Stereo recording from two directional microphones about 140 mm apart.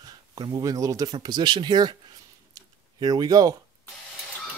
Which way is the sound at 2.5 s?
30° right (ahead or behind).